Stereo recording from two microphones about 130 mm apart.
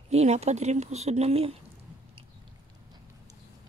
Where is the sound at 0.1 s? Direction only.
55° right (ahead or behind).